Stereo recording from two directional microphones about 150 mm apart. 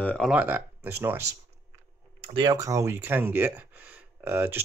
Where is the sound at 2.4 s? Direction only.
20° right (ahead or behind).